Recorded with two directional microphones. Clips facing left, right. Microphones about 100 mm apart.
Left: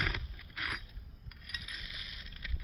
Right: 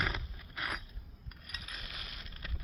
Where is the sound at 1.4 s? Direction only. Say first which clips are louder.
Even; 40° right (ahead or behind).